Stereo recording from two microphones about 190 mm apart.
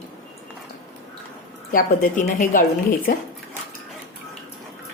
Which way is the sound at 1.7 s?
45° left (ahead or behind).